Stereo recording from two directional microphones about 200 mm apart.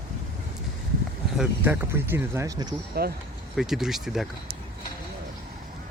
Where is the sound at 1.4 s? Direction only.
10° right (ahead or behind).